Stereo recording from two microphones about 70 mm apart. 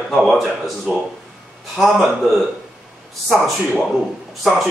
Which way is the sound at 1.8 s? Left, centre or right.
Centre.